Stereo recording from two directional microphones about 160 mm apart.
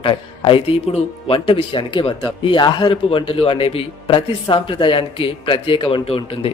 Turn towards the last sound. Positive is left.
turn(degrees=35)  # may be behind; listen again after turning